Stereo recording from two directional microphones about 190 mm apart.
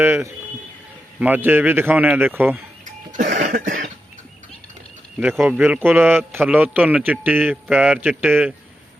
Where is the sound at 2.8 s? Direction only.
40° right (ahead or behind).